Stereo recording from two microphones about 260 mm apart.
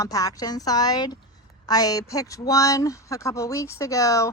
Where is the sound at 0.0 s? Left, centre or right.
Centre.